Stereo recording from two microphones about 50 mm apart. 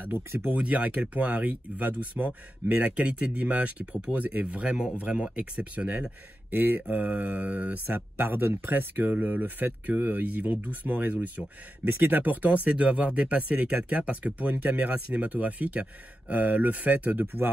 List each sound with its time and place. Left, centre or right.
0.6 s speech: right
6.5 s speech: right